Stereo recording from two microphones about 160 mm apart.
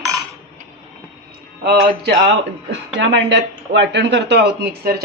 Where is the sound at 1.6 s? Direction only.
90° right.